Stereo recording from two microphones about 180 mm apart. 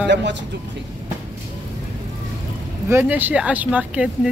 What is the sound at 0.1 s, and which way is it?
Speech, 75° right (ahead or behind).